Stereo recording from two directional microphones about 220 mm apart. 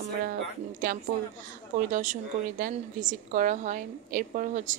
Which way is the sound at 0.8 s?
35° right (ahead or behind).